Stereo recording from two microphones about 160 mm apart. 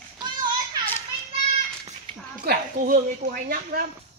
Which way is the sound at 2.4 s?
60° right (ahead or behind).